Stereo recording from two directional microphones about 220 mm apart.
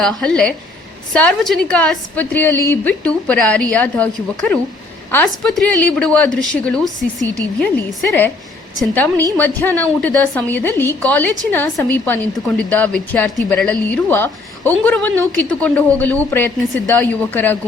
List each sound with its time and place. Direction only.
0.0 s a woman's voice: centre (ahead or behind)
8.8 s a woman's voice: 10° left (ahead or behind)